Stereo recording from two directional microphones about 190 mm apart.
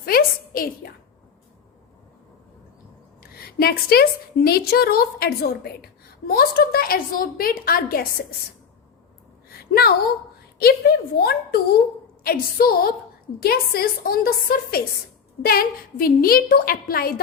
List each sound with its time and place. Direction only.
0.0 s a sound: 50° left (ahead or behind)
3.2 s a woman's voice: 55° left (ahead or behind)
10.6 s a woman's voice: 55° left (ahead or behind)